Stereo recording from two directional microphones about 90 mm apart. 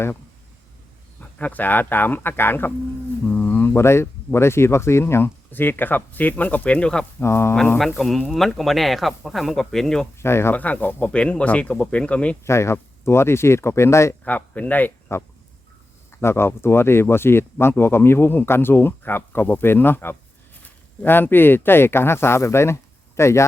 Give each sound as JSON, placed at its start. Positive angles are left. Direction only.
{"t": 1.2, "sound": "speech", "side_deg": 15}
{"t": 7.2, "sound": "speech", "side_deg": 30}
{"t": 7.9, "sound": "speech", "side_deg": 0}
{"t": 10.2, "sound": "speech", "side_deg": 30}
{"t": 10.6, "sound": "speech", "side_deg": 20}
{"t": 12.5, "sound": "speech", "side_deg": 30}
{"t": 14.3, "sound": "a man's voice", "side_deg": 15}